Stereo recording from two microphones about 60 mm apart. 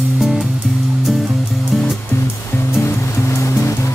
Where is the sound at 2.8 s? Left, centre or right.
Left.